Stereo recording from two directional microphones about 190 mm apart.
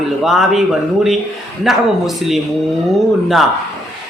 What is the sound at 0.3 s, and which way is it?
Speech, centre (ahead or behind).